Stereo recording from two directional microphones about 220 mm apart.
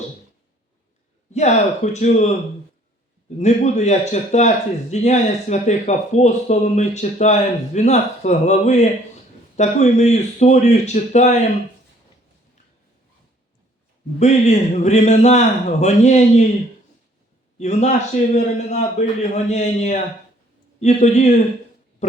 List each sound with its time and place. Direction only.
1.3 s a man's voice: 30° left (ahead or behind)
14.2 s a man's voice: 30° left (ahead or behind)
17.6 s a man's voice: 30° left (ahead or behind)